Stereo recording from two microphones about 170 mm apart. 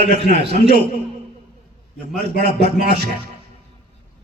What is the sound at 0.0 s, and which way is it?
Speech, 80° right.